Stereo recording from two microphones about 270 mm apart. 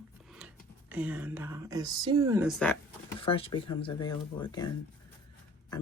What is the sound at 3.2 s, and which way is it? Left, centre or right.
Speech, left.